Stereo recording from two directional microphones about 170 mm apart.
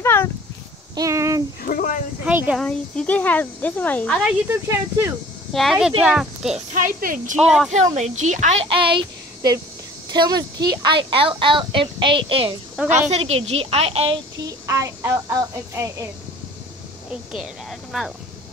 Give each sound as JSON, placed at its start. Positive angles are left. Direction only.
{"t": 0.0, "sound": "a sound", "side_deg": 15}
{"t": 0.9, "sound": "a sound", "side_deg": -20}
{"t": 1.6, "sound": "a sound", "side_deg": 55}
{"t": 2.2, "sound": "a woman's voice", "side_deg": -10}
{"t": 2.6, "sound": "speech", "side_deg": 5}
{"t": 4.5, "sound": "a woman's voice", "side_deg": -15}
{"t": 5.5, "sound": "speech", "side_deg": 0}
{"t": 6.7, "sound": "speech", "side_deg": -50}
{"t": 7.3, "sound": "speech", "side_deg": 0}
{"t": 7.7, "sound": "speech", "side_deg": -40}
{"t": 8.6, "sound": "a woman's voice", "side_deg": -30}
{"t": 14.4, "sound": "a woman's voice", "side_deg": -15}
{"t": 17.1, "sound": "a woman's voice", "side_deg": -5}